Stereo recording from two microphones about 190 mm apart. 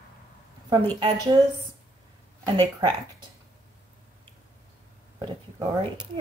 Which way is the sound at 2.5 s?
20° right (ahead or behind).